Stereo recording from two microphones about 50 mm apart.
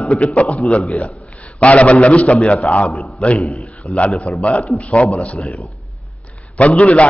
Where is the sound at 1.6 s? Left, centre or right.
Left.